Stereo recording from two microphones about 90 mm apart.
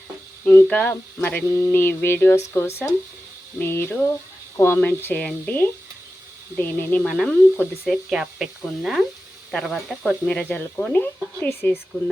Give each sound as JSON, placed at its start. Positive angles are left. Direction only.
{"t": 0.4, "sound": "speech", "side_deg": 25}
{"t": 7.0, "sound": "speech", "side_deg": 5}
{"t": 8.1, "sound": "speech", "side_deg": -5}